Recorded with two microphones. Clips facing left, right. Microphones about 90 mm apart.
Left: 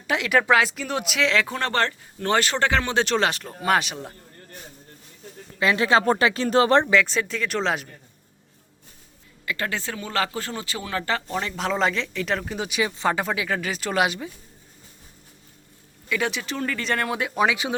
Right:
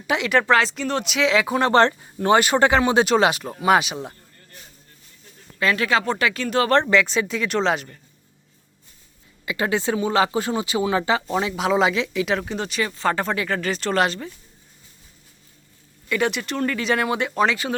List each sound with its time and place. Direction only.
0.1 s speech: centre (ahead or behind)
5.5 s speech: 20° left (ahead or behind)
6.9 s speech: centre (ahead or behind)
9.5 s speech: 20° right (ahead or behind); by 14.3 s 10° left (ahead or behind)
16.0 s speech: centre (ahead or behind)